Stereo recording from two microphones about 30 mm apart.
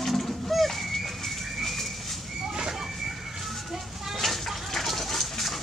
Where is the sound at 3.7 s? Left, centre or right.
Centre.